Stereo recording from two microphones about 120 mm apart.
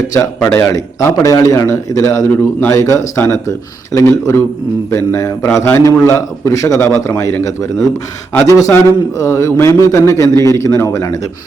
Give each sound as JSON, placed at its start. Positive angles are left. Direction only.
{"t": 0.5, "sound": "a man's voice", "side_deg": 25}
{"t": 8.4, "sound": "a man's voice", "side_deg": 25}